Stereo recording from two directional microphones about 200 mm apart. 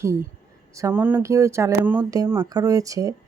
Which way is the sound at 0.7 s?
15° right (ahead or behind).